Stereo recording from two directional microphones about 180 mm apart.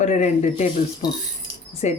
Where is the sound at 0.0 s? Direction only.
40° left (ahead or behind).